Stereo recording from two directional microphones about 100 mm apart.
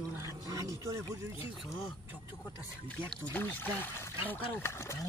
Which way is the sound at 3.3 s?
15° left (ahead or behind).